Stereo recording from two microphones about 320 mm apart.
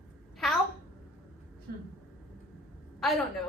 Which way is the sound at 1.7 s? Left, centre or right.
Right.